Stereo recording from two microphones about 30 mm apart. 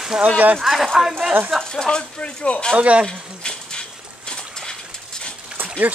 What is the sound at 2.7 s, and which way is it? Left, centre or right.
Speech, right.